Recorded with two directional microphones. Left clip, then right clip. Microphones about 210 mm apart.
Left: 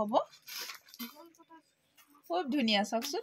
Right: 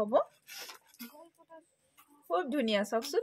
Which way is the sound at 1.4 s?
15° left (ahead or behind).